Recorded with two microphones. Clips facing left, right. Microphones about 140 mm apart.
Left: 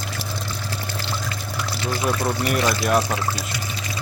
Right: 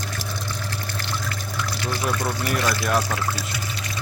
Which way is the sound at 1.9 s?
10° left (ahead or behind).